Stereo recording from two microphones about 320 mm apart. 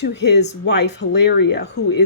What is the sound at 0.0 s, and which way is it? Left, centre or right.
Speech, left.